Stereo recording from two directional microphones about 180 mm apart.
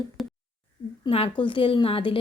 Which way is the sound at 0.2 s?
Centre (ahead or behind).